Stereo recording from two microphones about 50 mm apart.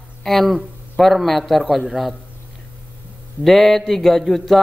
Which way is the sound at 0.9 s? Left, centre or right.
Centre.